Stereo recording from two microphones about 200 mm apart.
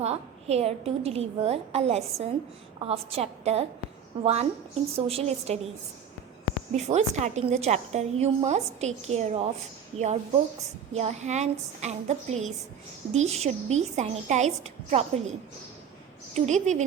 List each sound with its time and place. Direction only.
0.0 s a woman's voice: 30° right (ahead or behind)
6.7 s a woman's voice: 35° right (ahead or behind)
16.3 s a woman's voice: 35° right (ahead or behind)